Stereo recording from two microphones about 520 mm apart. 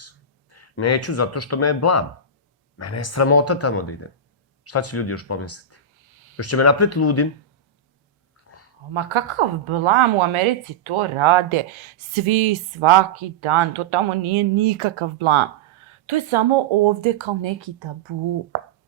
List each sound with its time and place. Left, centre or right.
0.5 s speech: left
6.1 s a sound: right
6.3 s speech: left
8.9 s a woman's voice: right